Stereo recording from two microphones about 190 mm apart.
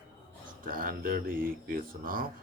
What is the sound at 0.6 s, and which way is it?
Speech, 45° right (ahead or behind).